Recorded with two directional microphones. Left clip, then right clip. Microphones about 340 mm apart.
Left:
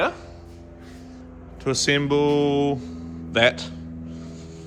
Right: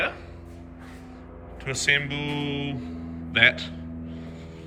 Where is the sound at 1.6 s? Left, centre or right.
Centre.